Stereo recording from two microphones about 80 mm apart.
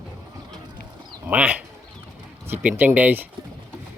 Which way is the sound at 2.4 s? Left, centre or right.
Right.